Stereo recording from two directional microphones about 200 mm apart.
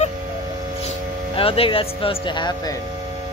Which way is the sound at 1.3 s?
30° left (ahead or behind).